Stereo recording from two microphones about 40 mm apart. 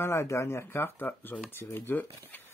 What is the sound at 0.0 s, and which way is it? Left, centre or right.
Speech, left.